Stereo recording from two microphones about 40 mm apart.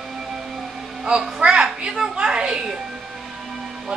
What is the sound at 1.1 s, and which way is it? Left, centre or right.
A child's voice, centre.